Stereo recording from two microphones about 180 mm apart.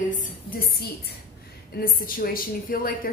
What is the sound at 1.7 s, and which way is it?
A woman's voice, 55° left (ahead or behind).